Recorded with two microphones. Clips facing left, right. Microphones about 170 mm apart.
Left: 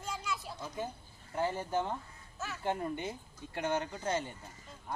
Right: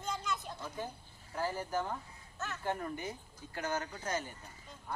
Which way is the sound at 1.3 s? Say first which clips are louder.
Left 3 dB; 25° left (ahead or behind).